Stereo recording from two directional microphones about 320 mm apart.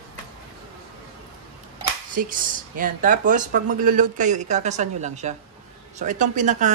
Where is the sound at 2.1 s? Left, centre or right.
Right.